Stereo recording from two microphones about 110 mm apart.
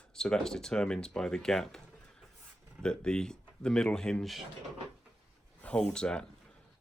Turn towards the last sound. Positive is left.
turn(degrees=10)  # may be behind; listen again after turning